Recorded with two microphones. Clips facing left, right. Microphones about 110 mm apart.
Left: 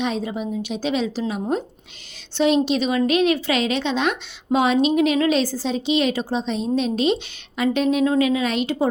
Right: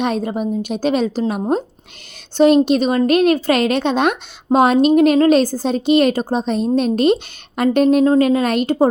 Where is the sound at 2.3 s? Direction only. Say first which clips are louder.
Right 6 dB; 50° right (ahead or behind).